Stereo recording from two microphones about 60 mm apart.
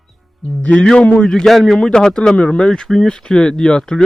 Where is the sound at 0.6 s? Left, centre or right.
Centre.